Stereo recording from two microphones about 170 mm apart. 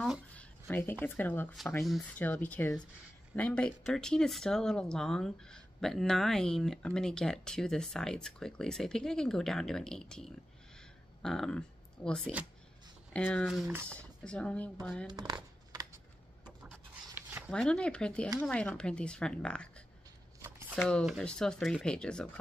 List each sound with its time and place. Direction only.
0.0 s a sound: centre (ahead or behind)
0.7 s speech: 10° left (ahead or behind)
1.9 s speech: centre (ahead or behind)
2.2 s speech: 10° left (ahead or behind)
13.5 s speech: centre (ahead or behind)
15.0 s a sound: 25° right (ahead or behind)
17.1 s a sound: 10° right (ahead or behind)
17.5 s speech: 5° left (ahead or behind)
20.7 s speech: centre (ahead or behind)